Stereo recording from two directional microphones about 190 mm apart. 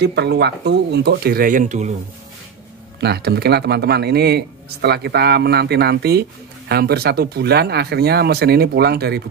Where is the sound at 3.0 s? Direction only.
60° right (ahead or behind).